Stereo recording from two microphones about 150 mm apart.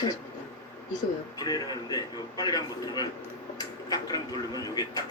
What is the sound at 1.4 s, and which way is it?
Speech, 25° left (ahead or behind).